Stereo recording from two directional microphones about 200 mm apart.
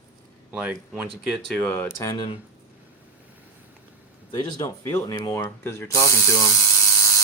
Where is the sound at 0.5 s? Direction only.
5° right (ahead or behind).